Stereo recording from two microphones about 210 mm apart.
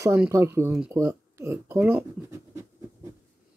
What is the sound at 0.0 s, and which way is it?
Speech, 10° right (ahead or behind).